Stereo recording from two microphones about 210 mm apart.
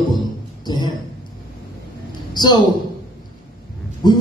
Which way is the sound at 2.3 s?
20° left (ahead or behind).